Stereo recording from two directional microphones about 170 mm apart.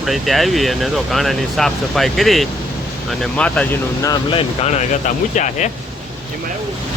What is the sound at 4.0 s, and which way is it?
Speech, 20° left (ahead or behind).